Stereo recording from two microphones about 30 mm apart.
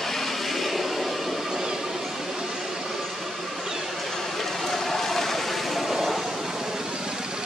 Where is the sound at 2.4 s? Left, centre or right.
Centre.